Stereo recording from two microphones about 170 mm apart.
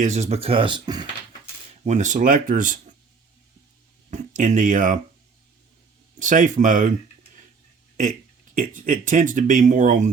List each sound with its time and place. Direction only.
0.0 s speech: 40° right (ahead or behind); by 1.0 s 25° right (ahead or behind)
1.8 s speech: 45° right (ahead or behind)
4.1 s speech: 45° right (ahead or behind)
6.1 s speech: 50° right (ahead or behind)
8.5 s speech: 50° right (ahead or behind)